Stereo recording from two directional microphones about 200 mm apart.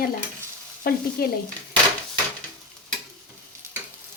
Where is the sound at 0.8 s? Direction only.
50° left (ahead or behind).